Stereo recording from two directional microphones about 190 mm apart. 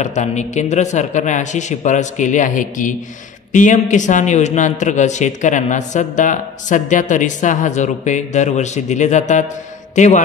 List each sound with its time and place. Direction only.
0.0 s a man's voice: 40° left (ahead or behind)